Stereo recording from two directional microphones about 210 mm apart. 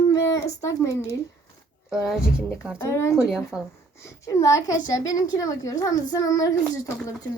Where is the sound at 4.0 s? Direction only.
15° left (ahead or behind).